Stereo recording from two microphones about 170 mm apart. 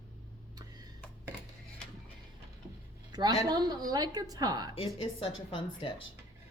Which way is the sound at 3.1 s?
25° right (ahead or behind).